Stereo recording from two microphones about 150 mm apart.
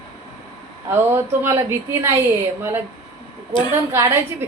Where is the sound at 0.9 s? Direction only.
15° right (ahead or behind).